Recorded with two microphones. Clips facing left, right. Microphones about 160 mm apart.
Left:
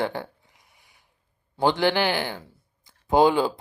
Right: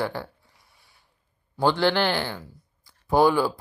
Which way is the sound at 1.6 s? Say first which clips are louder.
Even; 15° left (ahead or behind).